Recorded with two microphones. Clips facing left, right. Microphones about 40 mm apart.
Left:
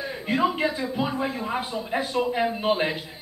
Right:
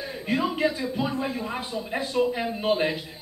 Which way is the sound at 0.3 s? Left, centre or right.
Centre.